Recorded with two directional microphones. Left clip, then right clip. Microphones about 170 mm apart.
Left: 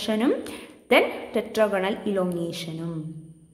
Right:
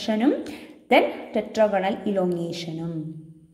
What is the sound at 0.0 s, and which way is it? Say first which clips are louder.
A woman's voice: right 1 dB; centre (ahead or behind).